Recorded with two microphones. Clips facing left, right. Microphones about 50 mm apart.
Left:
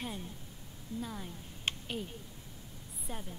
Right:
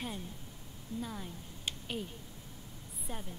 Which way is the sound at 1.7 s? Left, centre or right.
Left.